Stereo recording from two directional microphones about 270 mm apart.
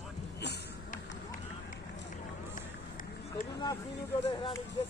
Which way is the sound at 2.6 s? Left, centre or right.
Left.